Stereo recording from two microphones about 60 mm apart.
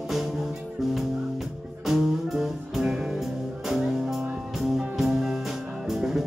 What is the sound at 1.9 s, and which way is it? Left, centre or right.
Music, centre.